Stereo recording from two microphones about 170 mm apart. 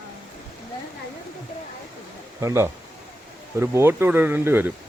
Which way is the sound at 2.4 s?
20° right (ahead or behind).